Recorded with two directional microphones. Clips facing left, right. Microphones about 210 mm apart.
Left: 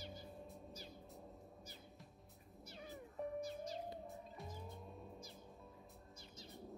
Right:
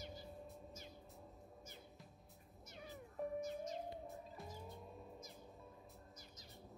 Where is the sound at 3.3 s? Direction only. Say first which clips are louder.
Right 1 dB; 35° left (ahead or behind).